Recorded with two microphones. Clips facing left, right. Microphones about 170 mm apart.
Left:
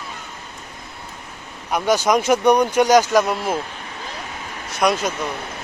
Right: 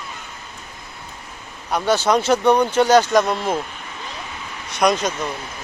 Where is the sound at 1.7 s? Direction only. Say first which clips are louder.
Even; 10° left (ahead or behind).